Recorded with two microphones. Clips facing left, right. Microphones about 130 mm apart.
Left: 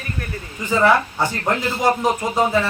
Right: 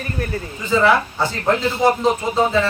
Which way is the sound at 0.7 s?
15° left (ahead or behind).